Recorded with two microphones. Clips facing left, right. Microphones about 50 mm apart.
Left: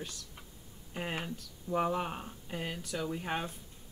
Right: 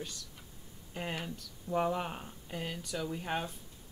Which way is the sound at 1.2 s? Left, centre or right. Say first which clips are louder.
Left 1 dB; centre.